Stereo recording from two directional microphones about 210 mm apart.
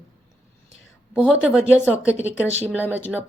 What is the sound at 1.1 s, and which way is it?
A woman's voice, 5° right (ahead or behind).